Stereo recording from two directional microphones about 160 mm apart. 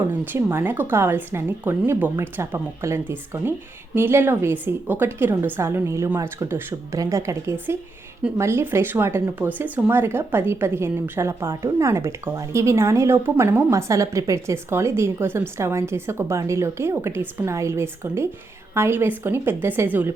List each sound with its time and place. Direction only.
0.1 s speech: 15° right (ahead or behind)